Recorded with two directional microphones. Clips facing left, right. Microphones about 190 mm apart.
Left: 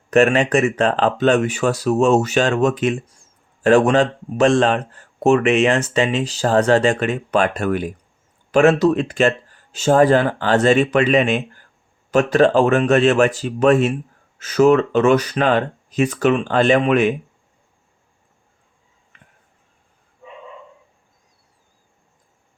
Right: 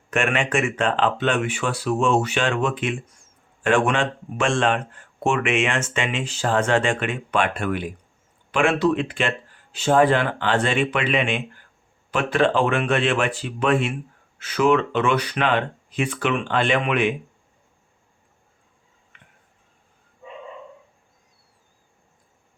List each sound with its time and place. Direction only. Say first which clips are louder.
0.1 s speech: left 8 dB; 35° left (ahead or behind)